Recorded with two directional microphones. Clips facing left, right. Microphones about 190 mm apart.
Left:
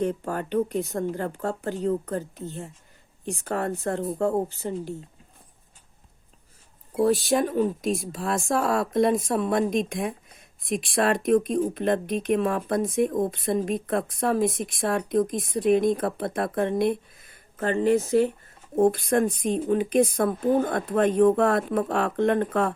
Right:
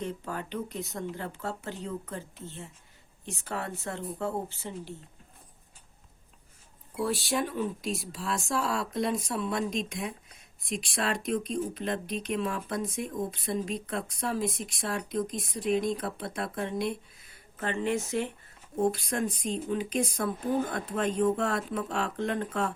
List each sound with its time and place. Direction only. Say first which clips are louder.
0.0 s speech: left 8 dB; 50° left (ahead or behind)
6.9 s speech: left 8 dB; 45° left (ahead or behind)
18.8 s a woman's voice: left 8 dB; 55° left (ahead or behind)